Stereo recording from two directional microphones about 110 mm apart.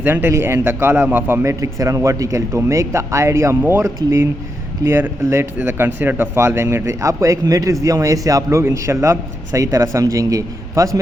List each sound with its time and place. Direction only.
0.0 s speech: 20° right (ahead or behind)